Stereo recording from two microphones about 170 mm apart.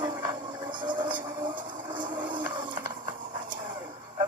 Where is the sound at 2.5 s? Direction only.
30° right (ahead or behind).